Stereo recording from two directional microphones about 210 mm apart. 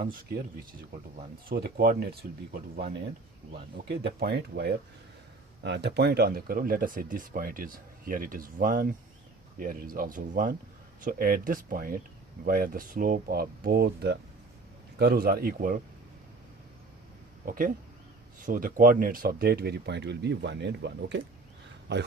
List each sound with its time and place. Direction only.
1.5 s speech: 45° right (ahead or behind)
4.2 s speech: 50° right (ahead or behind)
17.4 s speech: 40° right (ahead or behind)